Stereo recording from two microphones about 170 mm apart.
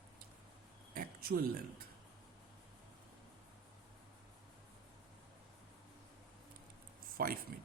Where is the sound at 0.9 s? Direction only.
60° right (ahead or behind).